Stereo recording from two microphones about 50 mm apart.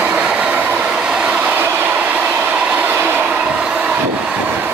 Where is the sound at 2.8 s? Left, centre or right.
Right.